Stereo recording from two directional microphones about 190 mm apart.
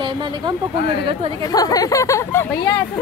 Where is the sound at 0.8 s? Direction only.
65° left (ahead or behind).